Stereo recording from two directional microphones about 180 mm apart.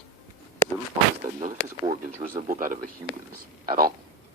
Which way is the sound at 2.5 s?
50° right (ahead or behind).